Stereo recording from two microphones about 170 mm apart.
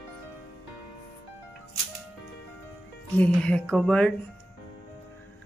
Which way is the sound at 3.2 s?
5° left (ahead or behind).